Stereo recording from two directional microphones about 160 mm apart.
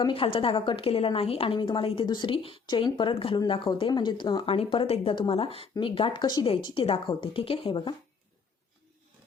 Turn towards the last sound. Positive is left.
turn(degrees=30)  # may be behind; listen again after turning